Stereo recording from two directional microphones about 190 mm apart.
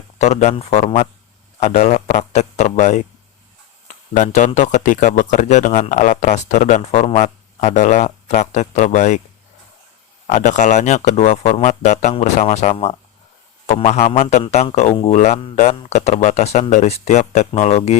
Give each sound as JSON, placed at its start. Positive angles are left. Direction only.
{"t": 0.2, "sound": "speech", "side_deg": 35}
{"t": 10.2, "sound": "speech", "side_deg": 40}